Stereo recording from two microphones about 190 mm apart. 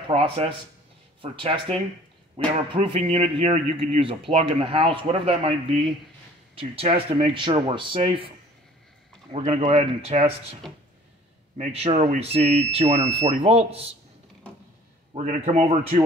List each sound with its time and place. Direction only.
0.1 s speech: 30° right (ahead or behind)
9.3 s speech: 35° right (ahead or behind)
15.1 s speech: 40° right (ahead or behind)